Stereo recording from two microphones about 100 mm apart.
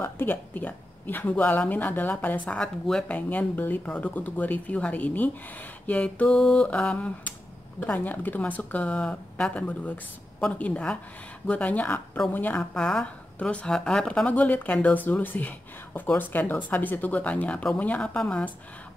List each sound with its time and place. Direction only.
0.0 s a woman's voice: 20° left (ahead or behind)